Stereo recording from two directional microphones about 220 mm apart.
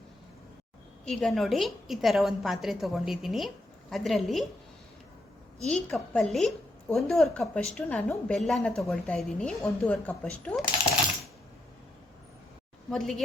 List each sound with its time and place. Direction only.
1.0 s a woman's voice: centre (ahead or behind)
5.6 s a woman's voice: 5° left (ahead or behind)
12.9 s a woman's voice: centre (ahead or behind)